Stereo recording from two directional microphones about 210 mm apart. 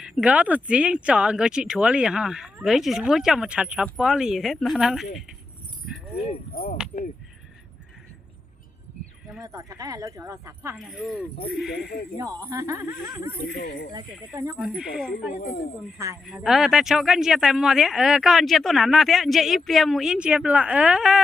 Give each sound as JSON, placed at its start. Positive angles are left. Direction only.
{"t": 0.0, "sound": "speech", "side_deg": -5}
{"t": 6.5, "sound": "speech", "side_deg": 45}
{"t": 9.4, "sound": "speech", "side_deg": -15}
{"t": 10.8, "sound": "speech", "side_deg": 0}
{"t": 12.1, "sound": "speech", "side_deg": -15}
{"t": 13.7, "sound": "speech", "side_deg": 45}
{"t": 14.5, "sound": "speech", "side_deg": 0}
{"t": 15.4, "sound": "speech", "side_deg": 45}
{"t": 16.2, "sound": "speech", "side_deg": 0}